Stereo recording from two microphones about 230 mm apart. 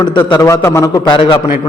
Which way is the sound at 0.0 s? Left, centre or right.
Centre.